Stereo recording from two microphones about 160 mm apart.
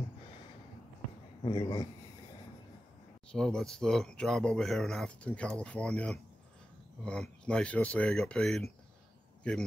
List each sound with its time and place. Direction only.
1.4 s speech: 25° left (ahead or behind)
3.3 s speech: 5° left (ahead or behind)